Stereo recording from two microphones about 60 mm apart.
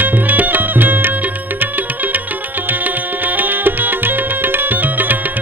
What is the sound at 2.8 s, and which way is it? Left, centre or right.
Music, right.